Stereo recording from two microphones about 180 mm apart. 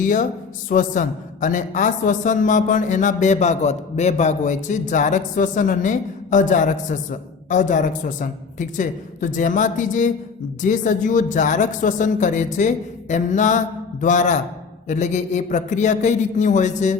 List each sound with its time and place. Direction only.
0.0 s a man's voice: 45° left (ahead or behind)